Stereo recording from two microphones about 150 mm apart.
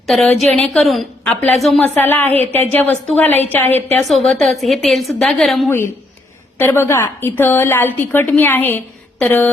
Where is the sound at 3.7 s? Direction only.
45° right (ahead or behind).